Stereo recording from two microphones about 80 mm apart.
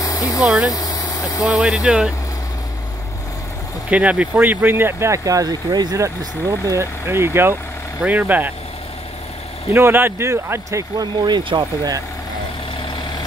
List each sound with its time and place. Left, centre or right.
0.0 s a sound: left
0.4 s speech: centre
0.7 s vehicle: left
1.4 s speech: centre
3.9 s speech: centre; by 5.9 s right
6.6 s speech: right
8.0 s speech: centre
9.7 s speech: right
11.1 s speech: right